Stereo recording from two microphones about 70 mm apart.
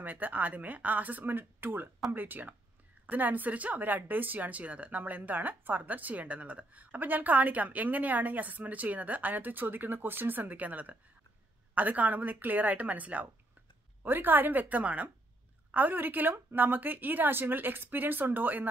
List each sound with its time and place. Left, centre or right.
0.0 s speech: right